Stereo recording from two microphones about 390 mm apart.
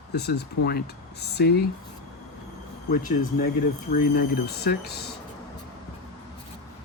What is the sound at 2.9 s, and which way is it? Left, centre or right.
Speech, centre.